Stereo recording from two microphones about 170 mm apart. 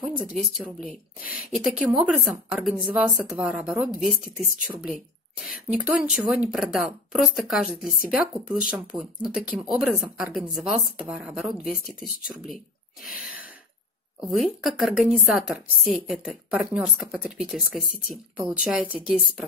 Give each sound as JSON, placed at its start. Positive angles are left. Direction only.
{"t": 0.2, "sound": "speech", "side_deg": -5}
{"t": 13.0, "sound": "gasp", "side_deg": -5}
{"t": 14.2, "sound": "speech", "side_deg": 0}